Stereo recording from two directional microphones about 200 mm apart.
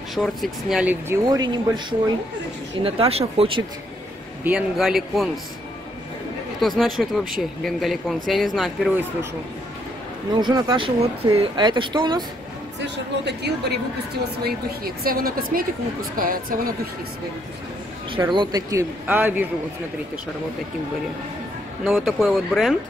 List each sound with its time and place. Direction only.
0.1 s speech: centre (ahead or behind)
1.3 s speech: 20° right (ahead or behind)
4.5 s speech: centre (ahead or behind)
6.6 s speech: centre (ahead or behind)
10.4 s speech: 20° right (ahead or behind)
12.8 s a woman's voice: 60° right (ahead or behind)
15.0 s a woman's voice: 45° right (ahead or behind)
18.3 s speech: 20° right (ahead or behind)
21.8 s speech: centre (ahead or behind)